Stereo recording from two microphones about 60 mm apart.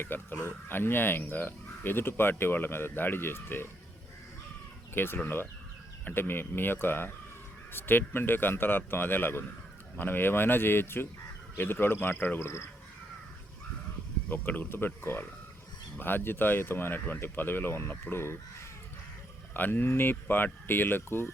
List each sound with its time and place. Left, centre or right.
0.0 s speech: left
4.9 s speech: left
14.3 s speech: left
19.5 s speech: left